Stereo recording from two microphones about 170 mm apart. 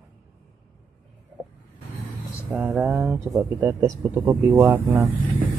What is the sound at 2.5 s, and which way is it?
Speech, 5° right (ahead or behind).